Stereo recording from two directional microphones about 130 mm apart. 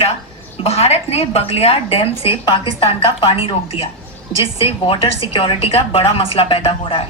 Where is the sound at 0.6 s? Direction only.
55° left (ahead or behind).